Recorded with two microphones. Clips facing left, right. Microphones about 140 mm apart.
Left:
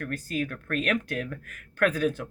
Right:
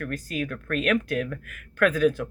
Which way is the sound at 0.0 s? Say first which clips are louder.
Right 1 dB; 40° left (ahead or behind).